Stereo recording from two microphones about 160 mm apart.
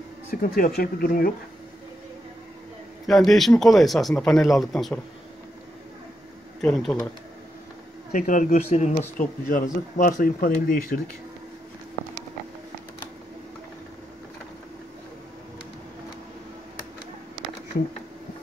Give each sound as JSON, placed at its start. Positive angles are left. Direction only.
{"t": 0.3, "sound": "speech", "side_deg": 65}
{"t": 3.1, "sound": "speech", "side_deg": 0}
{"t": 6.6, "sound": "speech", "side_deg": 5}
{"t": 8.1, "sound": "speech", "side_deg": 55}
{"t": 9.5, "sound": "speech", "side_deg": 60}